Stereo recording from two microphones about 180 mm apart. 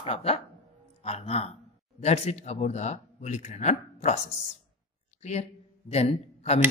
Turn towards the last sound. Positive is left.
turn(degrees=35)  # may be behind; listen again after turning